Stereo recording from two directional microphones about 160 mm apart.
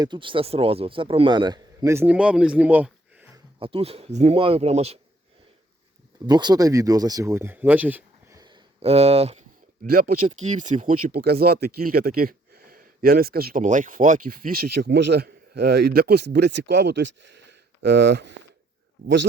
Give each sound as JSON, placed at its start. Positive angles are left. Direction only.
{"t": 0.0, "sound": "a man's voice", "side_deg": -30}
{"t": 3.6, "sound": "speech", "side_deg": -35}
{"t": 6.2, "sound": "a man's voice", "side_deg": -25}
{"t": 8.4, "sound": "a sound", "side_deg": -30}
{"t": 9.8, "sound": "speech", "side_deg": -65}